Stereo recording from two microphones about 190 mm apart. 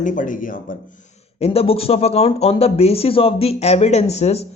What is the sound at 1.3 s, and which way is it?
Speech, 30° left (ahead or behind).